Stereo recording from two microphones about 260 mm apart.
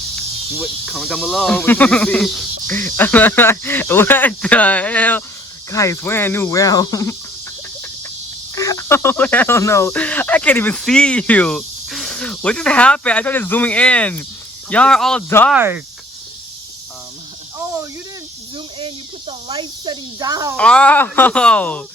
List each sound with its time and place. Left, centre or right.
0.5 s speech: centre
8.5 s speech: centre
15.5 s speech: centre
17.6 s cricket: centre
18.5 s snake: centre
20.6 s speech: centre